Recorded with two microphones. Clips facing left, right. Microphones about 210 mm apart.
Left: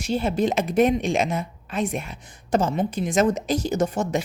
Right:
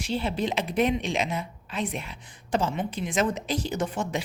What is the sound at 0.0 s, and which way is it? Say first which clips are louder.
A woman's voice: left 5 dB; 45° left (ahead or behind).